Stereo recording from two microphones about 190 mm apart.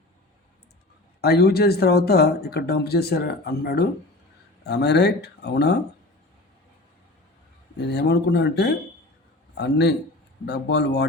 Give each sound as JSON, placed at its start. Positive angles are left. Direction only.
{"t": 1.2, "sound": "speech", "side_deg": 55}
{"t": 7.8, "sound": "speech", "side_deg": 60}